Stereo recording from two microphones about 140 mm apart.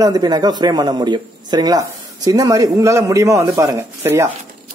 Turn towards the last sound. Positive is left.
turn(degrees=-20)  # may be behind; listen again after turning